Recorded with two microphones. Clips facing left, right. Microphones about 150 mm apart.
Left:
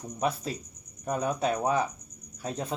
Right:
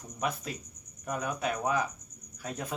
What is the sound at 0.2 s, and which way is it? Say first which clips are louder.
Speech: left 4 dB; 30° left (ahead or behind).